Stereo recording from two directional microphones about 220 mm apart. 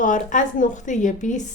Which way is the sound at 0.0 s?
35° left (ahead or behind).